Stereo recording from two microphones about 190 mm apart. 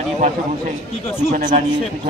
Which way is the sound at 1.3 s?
45° right (ahead or behind).